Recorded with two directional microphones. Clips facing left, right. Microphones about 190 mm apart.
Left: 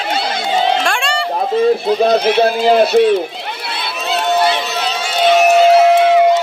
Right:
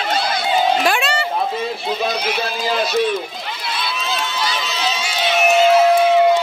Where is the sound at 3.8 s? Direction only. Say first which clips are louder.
Left 6 dB; 65° left (ahead or behind).